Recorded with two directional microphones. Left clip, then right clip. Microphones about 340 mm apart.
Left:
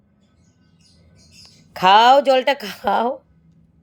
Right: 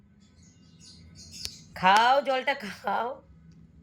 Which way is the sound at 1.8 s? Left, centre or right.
Centre.